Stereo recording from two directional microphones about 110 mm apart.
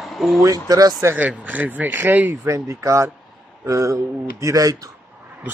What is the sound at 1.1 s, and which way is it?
Speech, 15° right (ahead or behind).